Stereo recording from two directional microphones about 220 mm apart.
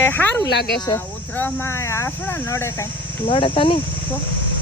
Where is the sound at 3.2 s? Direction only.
25° left (ahead or behind).